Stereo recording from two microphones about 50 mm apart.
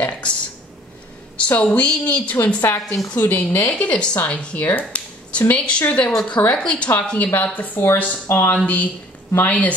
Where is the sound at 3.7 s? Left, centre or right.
Left.